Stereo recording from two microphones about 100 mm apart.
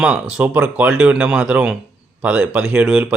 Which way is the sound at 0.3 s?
15° right (ahead or behind).